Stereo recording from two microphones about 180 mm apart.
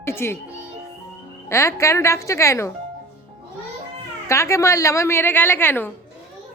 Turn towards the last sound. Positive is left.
turn(degrees=10)  # may be behind; listen again after turning